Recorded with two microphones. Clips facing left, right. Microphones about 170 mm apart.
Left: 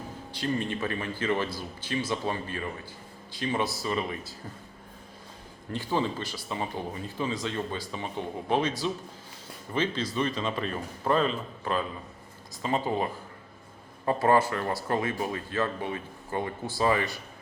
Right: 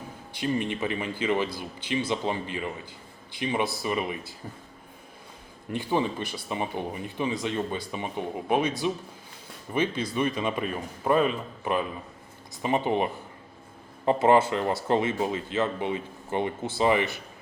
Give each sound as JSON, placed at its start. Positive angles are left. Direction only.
{"t": 0.3, "sound": "speech", "side_deg": -15}
{"t": 5.7, "sound": "speech", "side_deg": -15}
{"t": 9.7, "sound": "speech", "side_deg": -15}